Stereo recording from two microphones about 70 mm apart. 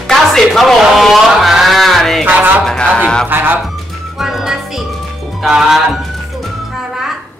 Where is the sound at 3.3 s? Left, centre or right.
Right.